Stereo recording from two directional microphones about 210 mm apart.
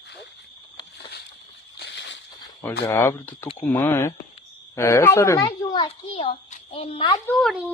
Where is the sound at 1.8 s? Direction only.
55° left (ahead or behind).